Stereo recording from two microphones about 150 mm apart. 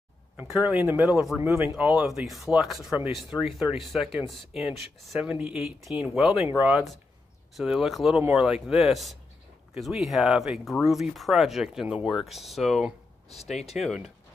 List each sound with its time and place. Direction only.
0.4 s speech: 10° right (ahead or behind)